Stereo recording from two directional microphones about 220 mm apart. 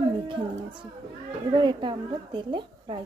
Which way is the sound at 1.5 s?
20° right (ahead or behind).